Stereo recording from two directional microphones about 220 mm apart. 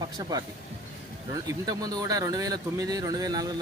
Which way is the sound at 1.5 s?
15° right (ahead or behind).